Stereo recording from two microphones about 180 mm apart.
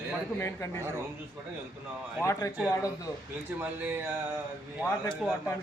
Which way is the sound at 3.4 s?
10° right (ahead or behind).